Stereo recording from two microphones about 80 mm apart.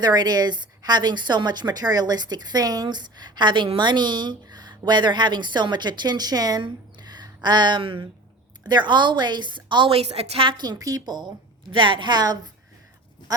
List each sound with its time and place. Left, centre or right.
0.0 s a woman's voice: right
8.6 s a woman's voice: right
10.4 s a woman's voice: right